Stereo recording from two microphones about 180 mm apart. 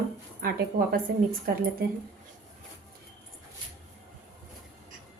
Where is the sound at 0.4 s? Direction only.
55° right (ahead or behind).